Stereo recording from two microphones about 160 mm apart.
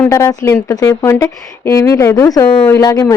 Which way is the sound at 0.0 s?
15° left (ahead or behind).